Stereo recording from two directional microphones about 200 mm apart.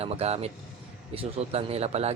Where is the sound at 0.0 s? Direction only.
30° right (ahead or behind).